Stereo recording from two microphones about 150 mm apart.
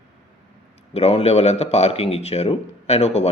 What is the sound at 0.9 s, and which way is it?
Speech, 45° left (ahead or behind).